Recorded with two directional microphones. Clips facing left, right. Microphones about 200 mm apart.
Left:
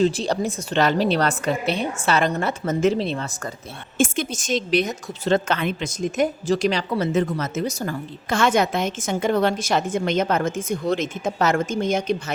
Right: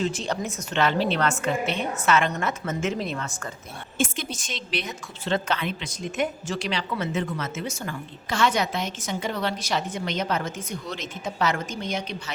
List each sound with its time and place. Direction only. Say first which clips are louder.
0.0 s a woman's voice: left 7 dB; 35° left (ahead or behind)
3.9 s a woman's voice: left 6 dB; 50° left (ahead or behind)